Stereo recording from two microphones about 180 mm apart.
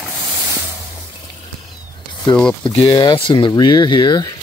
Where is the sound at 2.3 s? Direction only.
5° left (ahead or behind).